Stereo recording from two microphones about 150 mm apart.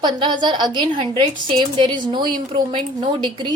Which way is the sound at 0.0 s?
30° right (ahead or behind).